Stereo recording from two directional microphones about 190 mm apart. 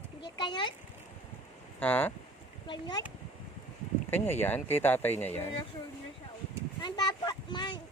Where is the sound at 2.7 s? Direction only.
20° left (ahead or behind).